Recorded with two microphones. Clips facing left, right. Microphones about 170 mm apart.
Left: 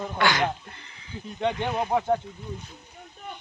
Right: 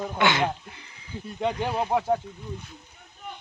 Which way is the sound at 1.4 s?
5° right (ahead or behind).